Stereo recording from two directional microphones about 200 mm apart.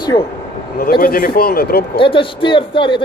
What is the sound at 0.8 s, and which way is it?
A man's voice, 45° left (ahead or behind).